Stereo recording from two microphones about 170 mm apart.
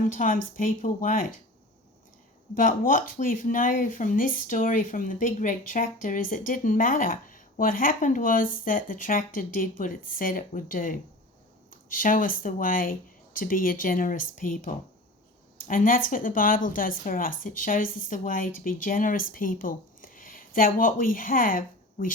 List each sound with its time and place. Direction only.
0.0 s speech: 50° left (ahead or behind)
2.6 s speech: 50° left (ahead or behind)